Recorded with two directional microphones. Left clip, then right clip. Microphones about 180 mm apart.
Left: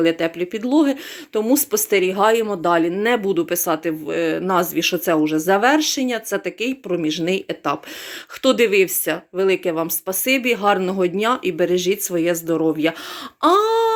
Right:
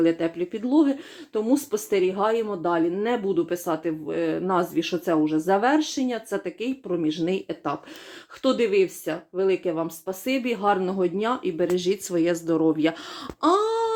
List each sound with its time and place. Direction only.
0.0 s speech: 5° left (ahead or behind)